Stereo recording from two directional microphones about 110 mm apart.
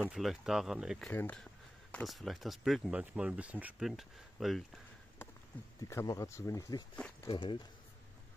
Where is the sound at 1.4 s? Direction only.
10° left (ahead or behind).